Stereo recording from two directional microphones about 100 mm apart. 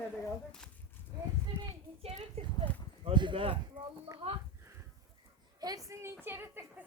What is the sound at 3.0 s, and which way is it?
Clip-clop, 55° right (ahead or behind).